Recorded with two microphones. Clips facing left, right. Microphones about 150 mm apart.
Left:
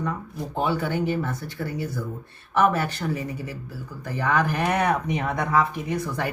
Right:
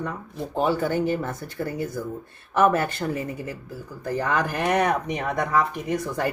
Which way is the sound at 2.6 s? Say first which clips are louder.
Right 1 dB; 50° right (ahead or behind).